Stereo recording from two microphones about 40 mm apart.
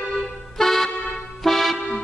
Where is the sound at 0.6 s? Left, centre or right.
Centre.